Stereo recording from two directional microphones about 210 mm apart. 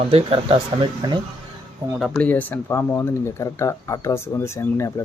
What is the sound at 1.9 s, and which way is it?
Speech, centre (ahead or behind).